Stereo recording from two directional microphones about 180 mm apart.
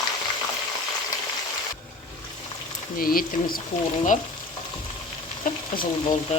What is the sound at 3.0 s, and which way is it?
Speech, 55° left (ahead or behind).